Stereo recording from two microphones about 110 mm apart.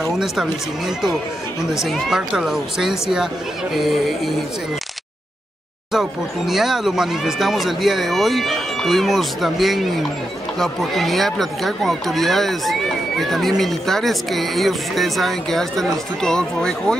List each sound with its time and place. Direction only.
0.0 s speech: 5° right (ahead or behind)
5.9 s speech: centre (ahead or behind)